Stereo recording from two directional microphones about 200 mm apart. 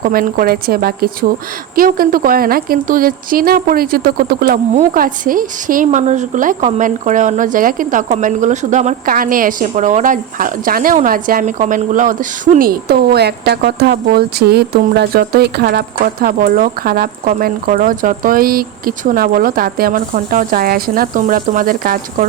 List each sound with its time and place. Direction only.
0.0 s a woman's voice: 45° right (ahead or behind)